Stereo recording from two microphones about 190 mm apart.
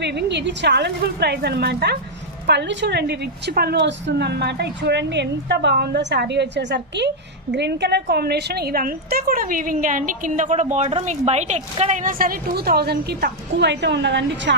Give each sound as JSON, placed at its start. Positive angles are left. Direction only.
{"t": 0.0, "sound": "a woman's voice", "side_deg": -65}